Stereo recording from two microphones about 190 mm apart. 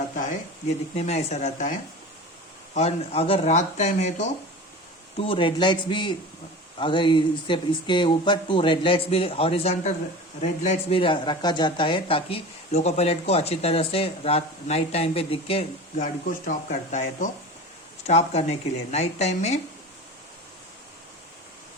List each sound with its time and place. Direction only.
0.9 s speech: 35° left (ahead or behind)
2.7 s speech: 35° left (ahead or behind)
5.2 s speech: 25° left (ahead or behind)